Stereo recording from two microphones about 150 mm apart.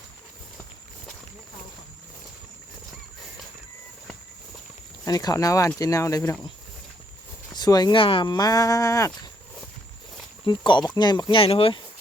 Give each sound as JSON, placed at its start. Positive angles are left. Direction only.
{"t": 5.0, "sound": "speech", "side_deg": 25}
{"t": 7.5, "sound": "speech", "side_deg": 25}
{"t": 10.4, "sound": "speech", "side_deg": 30}